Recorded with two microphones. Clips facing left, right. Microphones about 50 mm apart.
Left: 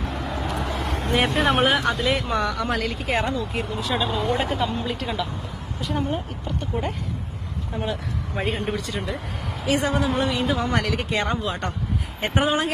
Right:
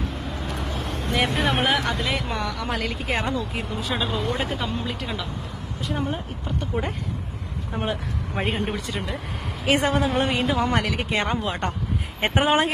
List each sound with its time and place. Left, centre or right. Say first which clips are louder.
1.3 s speech: left 3 dB; centre
7.7 s speech: right 1 dB; right
8.4 s speech: even; centre
9.6 s speech: right 1 dB; right
10.4 s speech: right 1 dB; centre
11.1 s speech: right 1 dB; right